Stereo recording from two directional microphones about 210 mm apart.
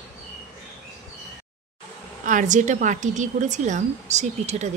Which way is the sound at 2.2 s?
35° right (ahead or behind).